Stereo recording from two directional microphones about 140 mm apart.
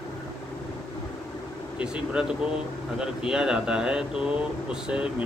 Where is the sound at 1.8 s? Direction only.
5° right (ahead or behind).